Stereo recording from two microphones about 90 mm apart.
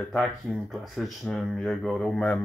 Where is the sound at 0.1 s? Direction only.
Centre (ahead or behind).